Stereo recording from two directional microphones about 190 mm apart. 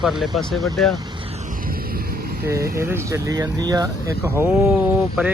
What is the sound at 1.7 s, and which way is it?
Vehicle, 50° right (ahead or behind).